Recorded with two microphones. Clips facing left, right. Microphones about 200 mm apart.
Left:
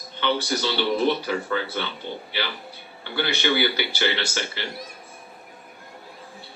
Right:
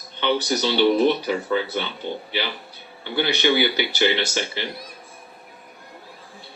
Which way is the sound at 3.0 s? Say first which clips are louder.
Right 4 dB; 15° right (ahead or behind).